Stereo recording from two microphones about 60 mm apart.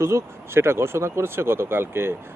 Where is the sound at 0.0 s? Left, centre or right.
Right.